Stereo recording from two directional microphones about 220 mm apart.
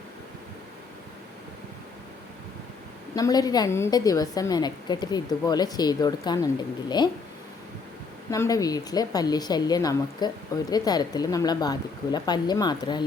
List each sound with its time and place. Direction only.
3.2 s a woman's voice: 15° left (ahead or behind)
8.3 s a woman's voice: 15° left (ahead or behind)